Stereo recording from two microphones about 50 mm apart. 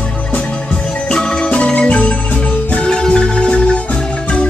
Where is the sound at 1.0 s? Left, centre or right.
Centre.